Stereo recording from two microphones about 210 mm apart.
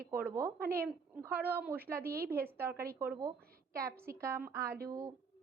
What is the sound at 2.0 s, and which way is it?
Speech, 45° right (ahead or behind).